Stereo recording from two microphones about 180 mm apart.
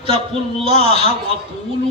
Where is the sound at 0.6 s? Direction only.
30° right (ahead or behind).